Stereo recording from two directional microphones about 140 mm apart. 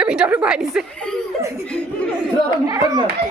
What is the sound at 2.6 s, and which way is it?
Speech, 25° right (ahead or behind).